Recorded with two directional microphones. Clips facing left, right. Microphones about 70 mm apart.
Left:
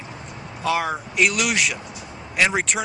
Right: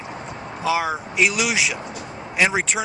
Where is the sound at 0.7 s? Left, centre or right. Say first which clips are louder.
Right 1 dB; centre.